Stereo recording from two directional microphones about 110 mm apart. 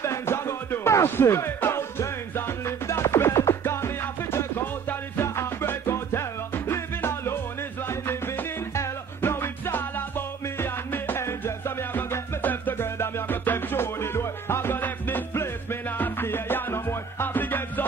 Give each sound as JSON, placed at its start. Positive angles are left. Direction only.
{"t": 0.0, "sound": "music", "side_deg": 25}